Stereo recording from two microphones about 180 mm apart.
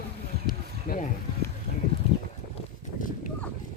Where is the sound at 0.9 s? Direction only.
45° left (ahead or behind).